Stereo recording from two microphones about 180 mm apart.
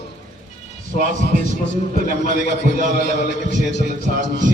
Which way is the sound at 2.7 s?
45° right (ahead or behind).